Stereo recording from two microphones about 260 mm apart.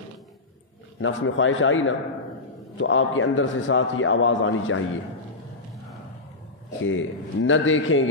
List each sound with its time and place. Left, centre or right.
0.9 s a man's voice: left
6.8 s a man's voice: left